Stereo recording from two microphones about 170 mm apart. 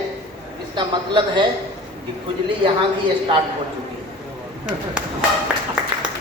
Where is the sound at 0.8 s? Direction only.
25° right (ahead or behind).